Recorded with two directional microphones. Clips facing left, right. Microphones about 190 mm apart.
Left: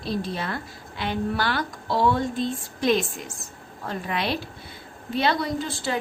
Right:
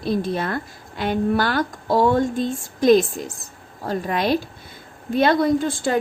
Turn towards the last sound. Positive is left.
turn(degrees=-50)  # may be behind; listen again after turning